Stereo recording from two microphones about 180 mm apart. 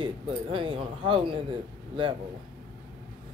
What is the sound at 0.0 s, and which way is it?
Speech, 30° right (ahead or behind).